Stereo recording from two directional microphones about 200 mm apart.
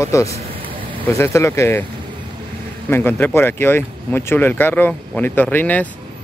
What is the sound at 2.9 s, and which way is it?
Speech, 10° left (ahead or behind).